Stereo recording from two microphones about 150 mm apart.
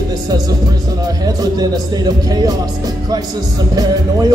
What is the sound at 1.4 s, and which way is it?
A man's voice, 25° right (ahead or behind).